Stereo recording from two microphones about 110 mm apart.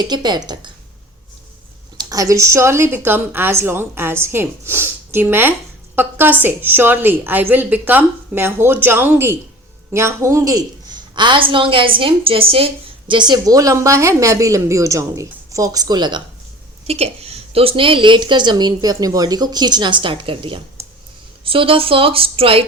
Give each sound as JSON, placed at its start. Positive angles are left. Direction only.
{"t": 0.0, "sound": "a woman's voice", "side_deg": -40}
{"t": 2.0, "sound": "a woman's voice", "side_deg": -30}
{"t": 13.1, "sound": "a woman's voice", "side_deg": -45}
{"t": 16.8, "sound": "a woman's voice", "side_deg": -70}
{"t": 20.8, "sound": "a sound", "side_deg": -25}
{"t": 21.4, "sound": "a woman's voice", "side_deg": -55}